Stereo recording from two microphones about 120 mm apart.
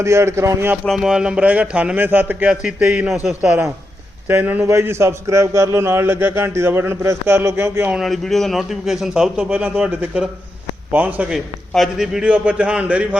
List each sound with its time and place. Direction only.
0.0 s a man's voice: 25° right (ahead or behind)
0.9 s a man's voice: 5° right (ahead or behind)
7.9 s a man's voice: centre (ahead or behind)
9.5 s a man's voice: 15° right (ahead or behind)
11.3 s a man's voice: centre (ahead or behind)